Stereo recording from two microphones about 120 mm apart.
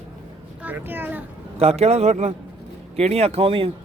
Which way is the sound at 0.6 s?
15° right (ahead or behind).